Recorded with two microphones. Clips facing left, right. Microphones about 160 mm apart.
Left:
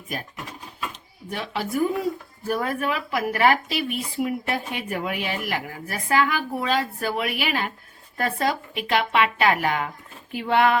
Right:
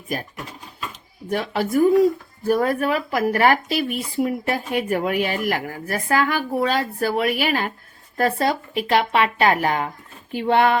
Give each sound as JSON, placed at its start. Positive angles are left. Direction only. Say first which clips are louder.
{"t": 1.3, "sound": "speech", "louder": "right 6 dB", "side_deg": -45}